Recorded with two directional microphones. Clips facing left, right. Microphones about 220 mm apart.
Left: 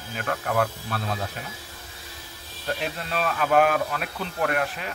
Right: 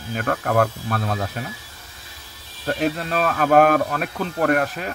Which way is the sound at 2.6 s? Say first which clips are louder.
Right 7 dB; 45° right (ahead or behind).